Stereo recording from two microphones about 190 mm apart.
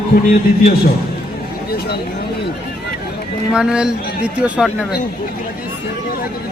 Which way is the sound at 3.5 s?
5° right (ahead or behind).